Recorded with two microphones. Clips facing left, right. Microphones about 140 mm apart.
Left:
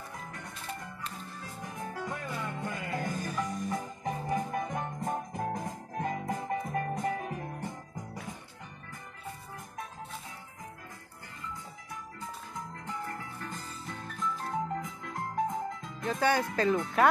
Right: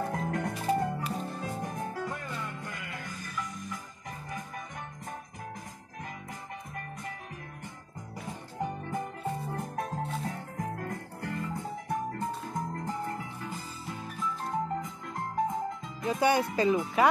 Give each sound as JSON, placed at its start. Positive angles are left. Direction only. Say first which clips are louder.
{"t": 0.0, "sound": "music", "louder": "right 12 dB", "side_deg": -60}
{"t": 2.6, "sound": "music", "louder": "left 5 dB", "side_deg": 25}
{"t": 3.0, "sound": "music", "louder": "left 7 dB", "side_deg": 45}
{"t": 6.7, "sound": "music", "louder": "left 9 dB", "side_deg": 55}
{"t": 9.6, "sound": "music", "louder": "right 8 dB", "side_deg": -60}
{"t": 13.4, "sound": "music", "louder": "right 2 dB", "side_deg": -5}
{"t": 16.2, "sound": "speech", "louder": "right 2 dB", "side_deg": -15}